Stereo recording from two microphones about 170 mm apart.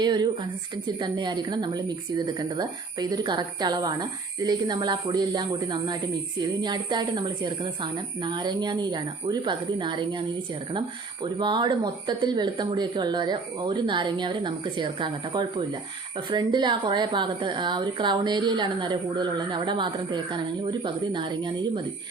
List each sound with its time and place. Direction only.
0.0 s a woman's voice: 25° right (ahead or behind)